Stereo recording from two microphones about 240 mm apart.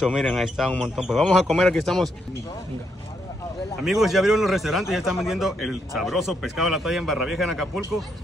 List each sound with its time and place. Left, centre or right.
0.0 s a man's voice: centre
3.8 s a man's voice: centre